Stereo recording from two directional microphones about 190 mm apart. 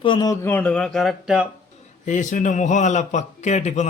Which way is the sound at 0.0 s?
20° left (ahead or behind).